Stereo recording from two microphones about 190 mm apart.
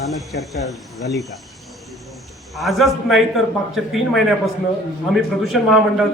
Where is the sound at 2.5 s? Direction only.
Centre (ahead or behind).